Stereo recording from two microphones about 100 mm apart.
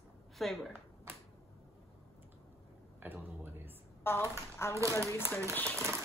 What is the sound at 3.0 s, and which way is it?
Speech, 20° right (ahead or behind).